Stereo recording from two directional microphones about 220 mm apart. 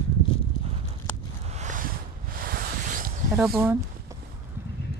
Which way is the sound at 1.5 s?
35° right (ahead or behind).